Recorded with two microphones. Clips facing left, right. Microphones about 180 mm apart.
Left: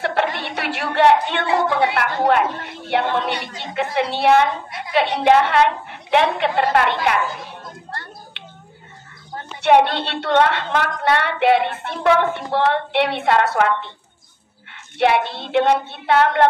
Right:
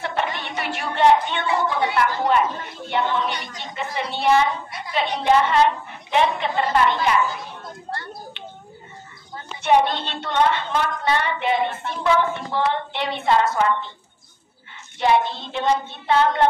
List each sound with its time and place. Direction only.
0.0 s a woman's voice: 65° left (ahead or behind)
9.6 s a woman's voice: 70° left (ahead or behind)
15.0 s a woman's voice: 70° left (ahead or behind)